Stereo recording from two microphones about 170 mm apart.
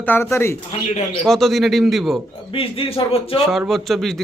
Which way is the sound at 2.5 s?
30° left (ahead or behind).